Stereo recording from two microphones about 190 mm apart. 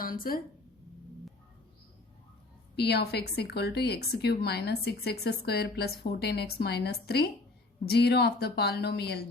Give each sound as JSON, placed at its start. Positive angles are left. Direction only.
{"t": 0.0, "sound": "a woman's voice", "side_deg": 50}
{"t": 2.7, "sound": "a woman's voice", "side_deg": 60}